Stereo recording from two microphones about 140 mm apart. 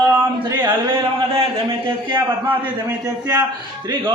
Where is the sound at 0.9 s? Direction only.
45° right (ahead or behind).